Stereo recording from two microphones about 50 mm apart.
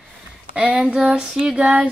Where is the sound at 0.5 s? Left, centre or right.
Right.